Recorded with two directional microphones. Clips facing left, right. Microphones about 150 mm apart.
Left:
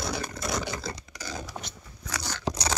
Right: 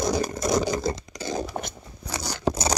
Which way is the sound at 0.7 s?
20° right (ahead or behind).